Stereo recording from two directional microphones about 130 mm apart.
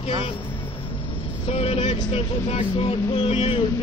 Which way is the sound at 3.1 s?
45° left (ahead or behind).